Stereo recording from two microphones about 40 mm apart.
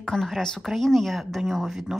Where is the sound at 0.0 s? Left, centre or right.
Centre.